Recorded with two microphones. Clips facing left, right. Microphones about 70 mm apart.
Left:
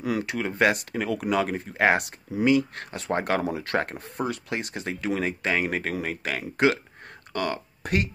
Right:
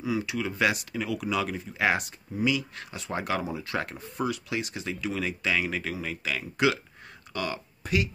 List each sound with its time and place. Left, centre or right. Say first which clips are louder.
0.0 s speech: left 2 dB; left
0.3 s speech: left 6 dB; left